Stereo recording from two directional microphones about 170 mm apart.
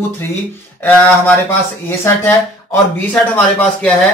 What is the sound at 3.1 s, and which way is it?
Speech, 10° left (ahead or behind).